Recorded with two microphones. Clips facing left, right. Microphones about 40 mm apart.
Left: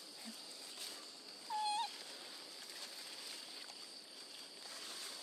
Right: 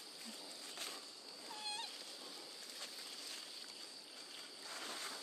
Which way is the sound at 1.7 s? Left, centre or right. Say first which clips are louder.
Left 6 dB; centre.